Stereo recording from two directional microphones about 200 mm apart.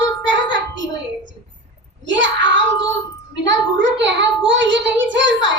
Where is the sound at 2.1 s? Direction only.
65° right (ahead or behind).